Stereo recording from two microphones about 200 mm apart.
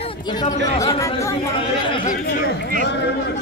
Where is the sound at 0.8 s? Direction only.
15° left (ahead or behind).